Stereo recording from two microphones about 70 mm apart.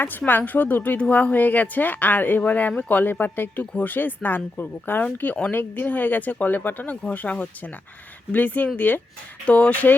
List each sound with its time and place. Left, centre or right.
0.0 s speech: left